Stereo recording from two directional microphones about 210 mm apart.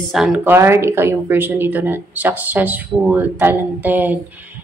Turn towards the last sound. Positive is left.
turn(degrees=-10)  # may be behind; listen again after turning